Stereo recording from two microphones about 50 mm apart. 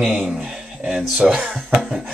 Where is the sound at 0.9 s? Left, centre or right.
Centre.